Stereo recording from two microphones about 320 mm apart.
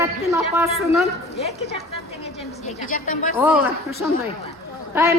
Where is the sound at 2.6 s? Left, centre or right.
Left.